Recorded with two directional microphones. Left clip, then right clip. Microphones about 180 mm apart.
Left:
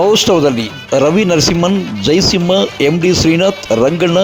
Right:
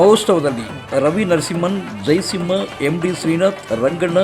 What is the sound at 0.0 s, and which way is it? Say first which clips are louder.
Speech: left 2 dB; 35° left (ahead or behind).